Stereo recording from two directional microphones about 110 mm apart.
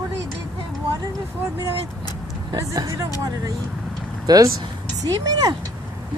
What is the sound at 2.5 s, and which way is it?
Speech, 30° right (ahead or behind).